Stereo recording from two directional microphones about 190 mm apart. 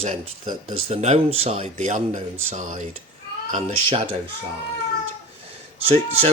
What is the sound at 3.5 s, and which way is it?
Speech, 30° right (ahead or behind).